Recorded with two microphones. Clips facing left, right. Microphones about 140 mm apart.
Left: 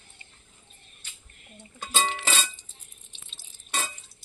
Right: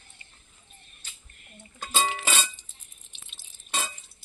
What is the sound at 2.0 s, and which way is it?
Music, 10° right (ahead or behind).